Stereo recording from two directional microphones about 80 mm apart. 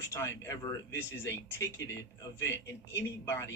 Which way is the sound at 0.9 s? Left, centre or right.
Left.